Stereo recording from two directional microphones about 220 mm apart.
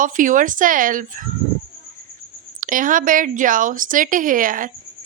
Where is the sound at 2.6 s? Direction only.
35° right (ahead or behind).